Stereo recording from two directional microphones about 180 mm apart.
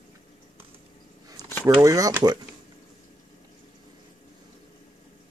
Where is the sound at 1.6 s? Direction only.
15° right (ahead or behind).